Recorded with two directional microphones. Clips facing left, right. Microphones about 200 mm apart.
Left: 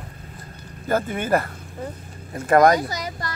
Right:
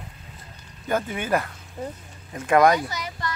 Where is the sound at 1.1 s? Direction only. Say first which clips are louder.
Left 3 dB; 50° left (ahead or behind).